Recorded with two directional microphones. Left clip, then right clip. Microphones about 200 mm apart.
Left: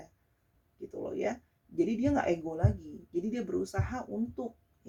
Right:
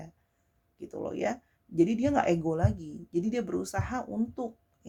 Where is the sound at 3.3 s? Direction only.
45° right (ahead or behind).